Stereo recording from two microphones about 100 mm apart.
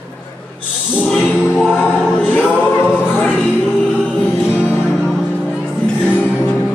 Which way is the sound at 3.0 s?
15° left (ahead or behind).